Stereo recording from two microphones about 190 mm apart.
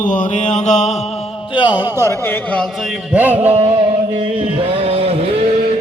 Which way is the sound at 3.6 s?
25° right (ahead or behind).